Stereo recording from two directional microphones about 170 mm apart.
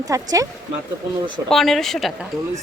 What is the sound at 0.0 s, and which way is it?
Speech, 20° right (ahead or behind).